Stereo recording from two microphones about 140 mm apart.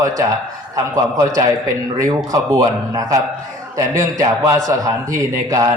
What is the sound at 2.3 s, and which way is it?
A man's voice, 25° right (ahead or behind).